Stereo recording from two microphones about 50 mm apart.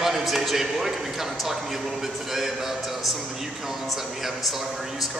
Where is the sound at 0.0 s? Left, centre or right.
Centre.